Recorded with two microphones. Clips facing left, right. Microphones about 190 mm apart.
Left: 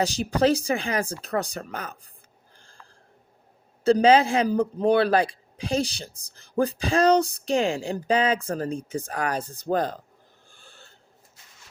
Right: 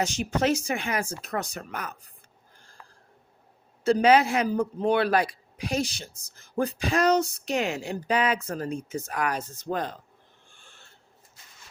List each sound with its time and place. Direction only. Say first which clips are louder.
0.0 s a man's voice: left 4 dB; 35° left (ahead or behind)
3.8 s a man's voice: left 2 dB; 30° left (ahead or behind)
10.5 s a sound: left 6 dB; 35° left (ahead or behind)